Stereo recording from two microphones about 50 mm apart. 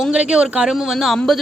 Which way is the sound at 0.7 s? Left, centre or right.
Centre.